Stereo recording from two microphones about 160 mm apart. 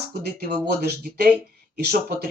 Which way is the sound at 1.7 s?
80° right.